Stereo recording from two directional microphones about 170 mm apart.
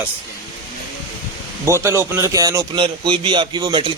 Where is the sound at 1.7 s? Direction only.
15° right (ahead or behind).